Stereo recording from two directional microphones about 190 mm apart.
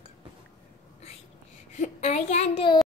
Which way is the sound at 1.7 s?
40° left (ahead or behind).